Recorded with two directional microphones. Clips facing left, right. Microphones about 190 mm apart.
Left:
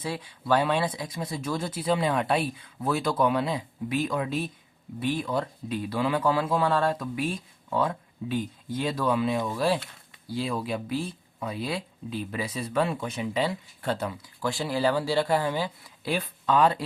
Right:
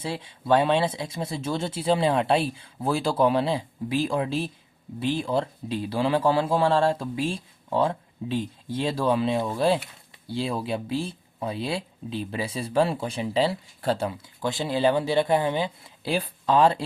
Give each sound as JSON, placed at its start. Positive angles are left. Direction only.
{"t": 0.0, "sound": "speech", "side_deg": -25}